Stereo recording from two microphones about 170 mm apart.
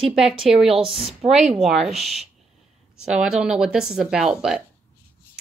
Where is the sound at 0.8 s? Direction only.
35° right (ahead or behind).